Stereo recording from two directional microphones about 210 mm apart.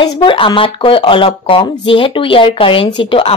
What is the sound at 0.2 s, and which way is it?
Speech, 25° left (ahead or behind).